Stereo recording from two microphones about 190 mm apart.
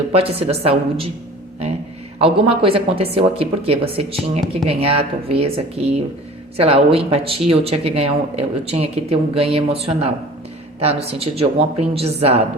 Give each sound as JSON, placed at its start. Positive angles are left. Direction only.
{"t": 0.1, "sound": "speech", "side_deg": -30}
{"t": 2.1, "sound": "speech", "side_deg": -30}